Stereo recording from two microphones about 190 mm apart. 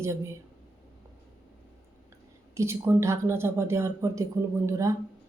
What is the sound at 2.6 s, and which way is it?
A woman's voice, 15° right (ahead or behind).